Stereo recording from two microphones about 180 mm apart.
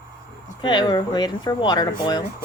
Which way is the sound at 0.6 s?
25° left (ahead or behind).